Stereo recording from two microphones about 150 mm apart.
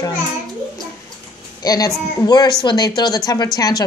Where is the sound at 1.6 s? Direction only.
25° left (ahead or behind).